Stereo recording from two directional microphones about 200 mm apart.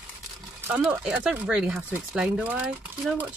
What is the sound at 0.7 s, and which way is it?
Speech, 5° right (ahead or behind).